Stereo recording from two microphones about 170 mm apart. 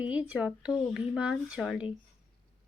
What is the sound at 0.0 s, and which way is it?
Speech, 10° right (ahead or behind).